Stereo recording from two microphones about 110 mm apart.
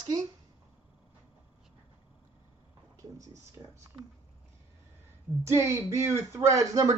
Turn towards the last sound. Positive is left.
turn(degrees=-30)  # may be behind; listen again after turning